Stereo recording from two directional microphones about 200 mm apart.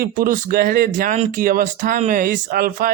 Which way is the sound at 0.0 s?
45° right (ahead or behind).